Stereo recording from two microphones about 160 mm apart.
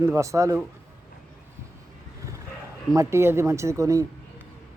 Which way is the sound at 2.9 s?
15° right (ahead or behind).